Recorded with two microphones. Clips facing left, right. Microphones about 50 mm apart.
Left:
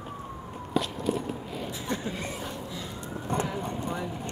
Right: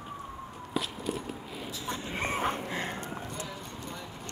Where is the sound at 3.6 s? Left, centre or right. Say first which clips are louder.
Left 9 dB; left.